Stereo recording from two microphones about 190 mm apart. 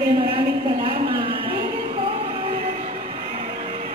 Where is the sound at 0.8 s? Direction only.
25° right (ahead or behind).